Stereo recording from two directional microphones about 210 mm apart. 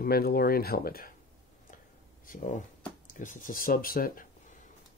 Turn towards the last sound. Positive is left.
turn(degrees=45)  # may be behind; listen again after turning